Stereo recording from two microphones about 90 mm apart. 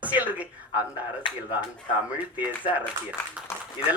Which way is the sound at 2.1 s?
15° right (ahead or behind).